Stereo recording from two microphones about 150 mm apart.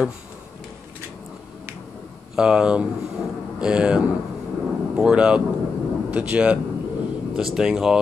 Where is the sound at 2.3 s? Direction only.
5° right (ahead or behind).